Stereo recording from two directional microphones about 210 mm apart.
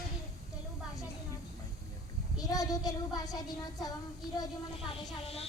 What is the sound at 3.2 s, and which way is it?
Speech, 20° left (ahead or behind).